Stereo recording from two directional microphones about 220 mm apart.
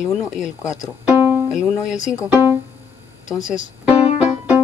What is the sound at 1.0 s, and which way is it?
Speech, 5° right (ahead or behind).